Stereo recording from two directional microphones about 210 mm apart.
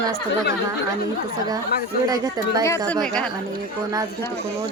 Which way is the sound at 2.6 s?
15° left (ahead or behind).